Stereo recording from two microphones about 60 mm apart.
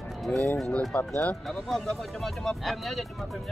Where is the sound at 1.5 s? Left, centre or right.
Centre.